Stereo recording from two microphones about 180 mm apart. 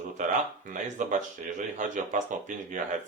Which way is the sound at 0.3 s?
45° right (ahead or behind).